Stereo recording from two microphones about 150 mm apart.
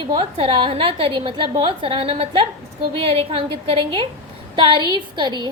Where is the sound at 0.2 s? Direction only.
40° right (ahead or behind).